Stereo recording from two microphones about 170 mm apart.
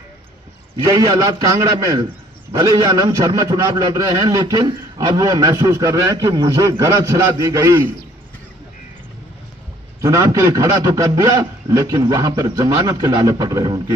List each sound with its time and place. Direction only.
0.8 s a man's voice: 20° right (ahead or behind)
10.0 s a man's voice: 20° right (ahead or behind)